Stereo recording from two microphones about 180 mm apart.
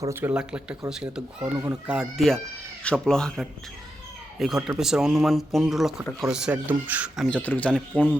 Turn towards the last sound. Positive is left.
turn(degrees=5)  # may be behind; listen again after turning